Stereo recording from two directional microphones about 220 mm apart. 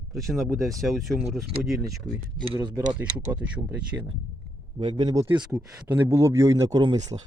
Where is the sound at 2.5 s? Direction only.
15° right (ahead or behind).